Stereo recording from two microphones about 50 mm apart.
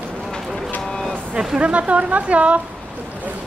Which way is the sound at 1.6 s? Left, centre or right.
Right.